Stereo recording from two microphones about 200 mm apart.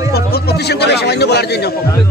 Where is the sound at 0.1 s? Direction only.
50° left (ahead or behind).